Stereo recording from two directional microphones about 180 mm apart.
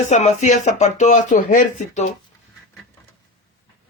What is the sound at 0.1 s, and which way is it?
Speech, 40° left (ahead or behind).